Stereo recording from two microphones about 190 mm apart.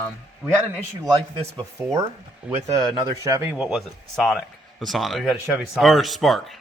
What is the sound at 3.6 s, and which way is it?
Speech, centre (ahead or behind).